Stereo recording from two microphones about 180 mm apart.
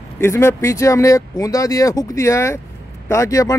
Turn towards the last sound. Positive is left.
turn(degrees=20)  # may be behind; listen again after turning